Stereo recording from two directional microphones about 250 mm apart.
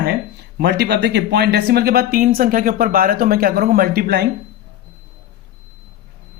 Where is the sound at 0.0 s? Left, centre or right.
Right.